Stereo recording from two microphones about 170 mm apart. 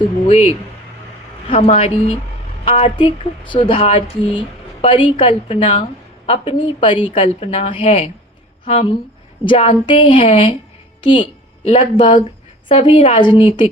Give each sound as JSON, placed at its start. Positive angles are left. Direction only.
{"t": 0.3, "sound": "a woman's voice", "side_deg": 40}